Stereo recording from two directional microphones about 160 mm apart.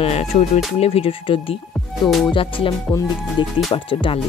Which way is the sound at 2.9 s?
30° left (ahead or behind).